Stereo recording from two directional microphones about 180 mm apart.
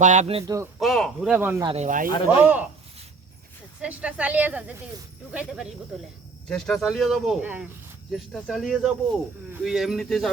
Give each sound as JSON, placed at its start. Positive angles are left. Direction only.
{"t": 0.0, "sound": "a man's voice", "side_deg": -40}
{"t": 0.4, "sound": "speech", "side_deg": -15}
{"t": 0.8, "sound": "a sound", "side_deg": 0}
{"t": 1.3, "sound": "speech", "side_deg": -10}
{"t": 1.6, "sound": "speech", "side_deg": -35}
{"t": 2.4, "sound": "speech", "side_deg": -10}
{"t": 3.8, "sound": "speech", "side_deg": -5}